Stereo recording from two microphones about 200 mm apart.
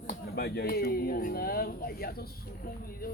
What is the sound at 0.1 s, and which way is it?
Speech, 50° left (ahead or behind).